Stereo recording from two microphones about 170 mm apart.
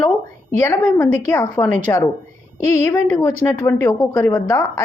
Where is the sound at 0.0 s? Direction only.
15° left (ahead or behind).